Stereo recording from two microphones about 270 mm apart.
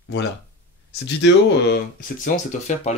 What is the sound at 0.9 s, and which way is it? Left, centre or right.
Speech, left.